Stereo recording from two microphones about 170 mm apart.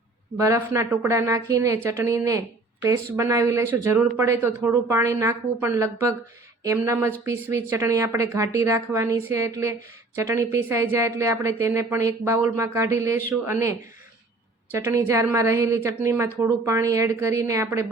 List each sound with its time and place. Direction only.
0.3 s a woman's voice: 20° right (ahead or behind)